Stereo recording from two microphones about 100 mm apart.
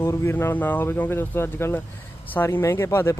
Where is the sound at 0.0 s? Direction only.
25° left (ahead or behind).